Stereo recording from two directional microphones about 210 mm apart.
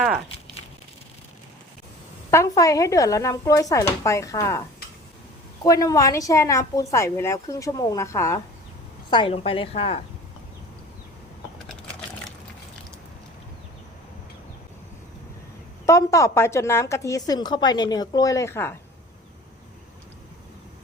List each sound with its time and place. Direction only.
2.3 s a woman's voice: 15° left (ahead or behind)
5.6 s a woman's voice: 15° left (ahead or behind)
9.0 s a woman's voice: 25° left (ahead or behind)
15.9 s a woman's voice: 15° left (ahead or behind)